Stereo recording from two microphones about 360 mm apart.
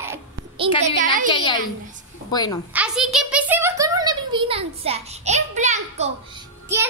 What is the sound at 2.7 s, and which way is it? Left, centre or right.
A woman's voice, centre.